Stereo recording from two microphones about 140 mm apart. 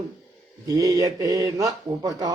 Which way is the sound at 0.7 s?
25° right (ahead or behind).